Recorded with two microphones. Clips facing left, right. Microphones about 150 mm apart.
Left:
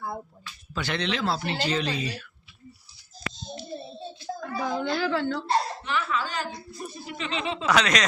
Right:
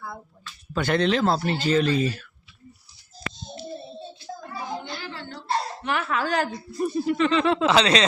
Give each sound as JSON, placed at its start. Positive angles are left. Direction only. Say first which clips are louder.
{"t": 0.7, "sound": "speech", "louder": "right 7 dB", "side_deg": -50}
{"t": 4.4, "sound": "a sound", "louder": "left 5 dB", "side_deg": 90}
{"t": 5.8, "sound": "speech", "louder": "right 3 dB", "side_deg": -55}
{"t": 7.6, "sound": "speech", "louder": "right 4 dB", "side_deg": -30}